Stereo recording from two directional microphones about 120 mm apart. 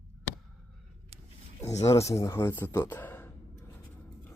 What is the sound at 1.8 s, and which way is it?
Speech, 25° left (ahead or behind).